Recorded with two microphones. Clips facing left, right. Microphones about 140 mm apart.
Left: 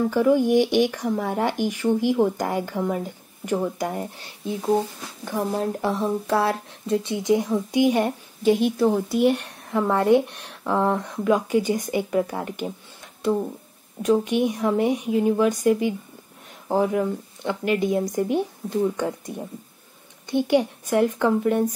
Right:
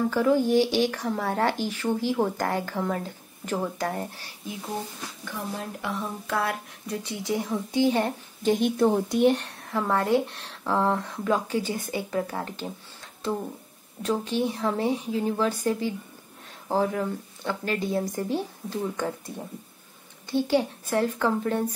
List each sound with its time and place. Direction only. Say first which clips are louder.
0.1 s speech: left 4 dB; 15° left (ahead or behind)
5.2 s speech: left 10 dB; 35° left (ahead or behind); by 12.7 s 15° left (ahead or behind)
14.0 s speech: left 6 dB; 15° left (ahead or behind)